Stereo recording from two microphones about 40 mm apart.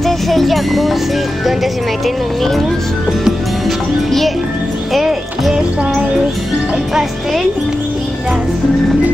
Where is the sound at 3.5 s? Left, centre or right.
Centre.